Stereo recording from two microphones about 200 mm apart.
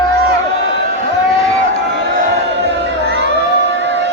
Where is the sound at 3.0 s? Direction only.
55° right (ahead or behind).